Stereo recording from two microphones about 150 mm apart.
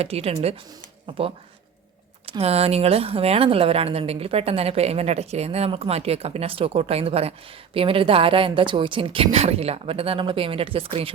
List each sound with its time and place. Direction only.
0.0 s speech: 40° right (ahead or behind)
2.4 s a woman's voice: 40° right (ahead or behind)